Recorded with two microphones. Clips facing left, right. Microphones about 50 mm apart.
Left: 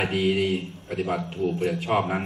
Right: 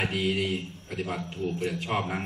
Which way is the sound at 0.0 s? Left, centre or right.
Centre.